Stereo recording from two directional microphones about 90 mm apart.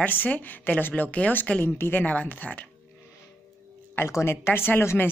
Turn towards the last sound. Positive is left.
turn(degrees=25)  # may be behind; listen again after turning